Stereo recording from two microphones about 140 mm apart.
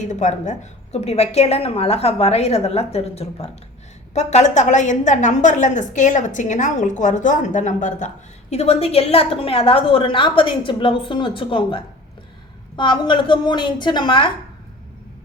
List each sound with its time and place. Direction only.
0.1 s a woman's voice: 60° left (ahead or behind); by 14.3 s 35° left (ahead or behind)